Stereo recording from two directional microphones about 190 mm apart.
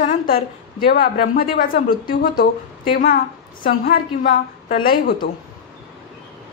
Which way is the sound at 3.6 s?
50° left (ahead or behind).